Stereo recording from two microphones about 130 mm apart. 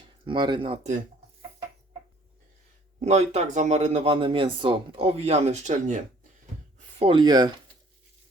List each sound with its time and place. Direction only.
0.3 s speech: 35° right (ahead or behind)
3.0 s speech: 55° right (ahead or behind)
7.0 s speech: 35° right (ahead or behind)